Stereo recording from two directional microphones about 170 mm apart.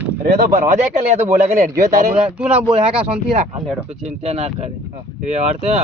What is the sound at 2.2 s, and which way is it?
Speech, 5° right (ahead or behind).